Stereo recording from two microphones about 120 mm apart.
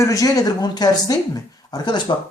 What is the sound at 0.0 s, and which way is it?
A man's voice, 30° left (ahead or behind).